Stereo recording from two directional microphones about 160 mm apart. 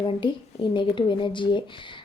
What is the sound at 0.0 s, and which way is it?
A woman's voice, 30° left (ahead or behind).